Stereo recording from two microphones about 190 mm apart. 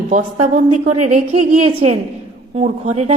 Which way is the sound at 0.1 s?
40° right (ahead or behind).